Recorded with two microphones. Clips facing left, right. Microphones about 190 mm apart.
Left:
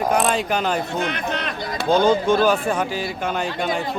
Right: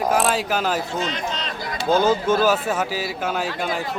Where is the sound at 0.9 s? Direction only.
60° left (ahead or behind).